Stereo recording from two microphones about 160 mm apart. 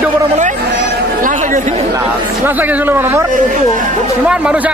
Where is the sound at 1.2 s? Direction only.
55° right (ahead or behind).